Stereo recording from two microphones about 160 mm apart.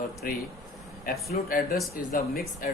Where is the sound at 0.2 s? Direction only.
60° left (ahead or behind).